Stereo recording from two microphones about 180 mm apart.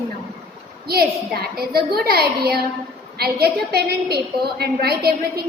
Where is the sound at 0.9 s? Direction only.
60° right (ahead or behind).